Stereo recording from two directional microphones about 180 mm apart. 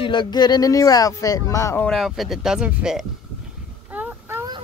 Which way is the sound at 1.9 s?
Centre (ahead or behind).